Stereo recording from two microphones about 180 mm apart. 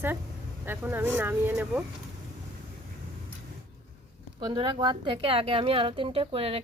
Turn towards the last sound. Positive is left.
turn(degrees=-35)  # may be behind; listen again after turning